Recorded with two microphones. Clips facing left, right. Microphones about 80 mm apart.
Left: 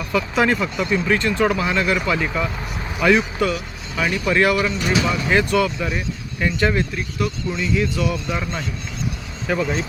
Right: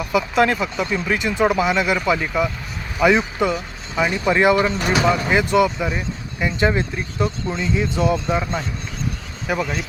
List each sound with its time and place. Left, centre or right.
0.0 s speech: centre; by 5.2 s right
5.3 s speech: centre
9.5 s speech: centre